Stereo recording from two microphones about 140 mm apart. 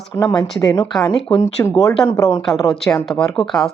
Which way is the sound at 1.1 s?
5° left (ahead or behind).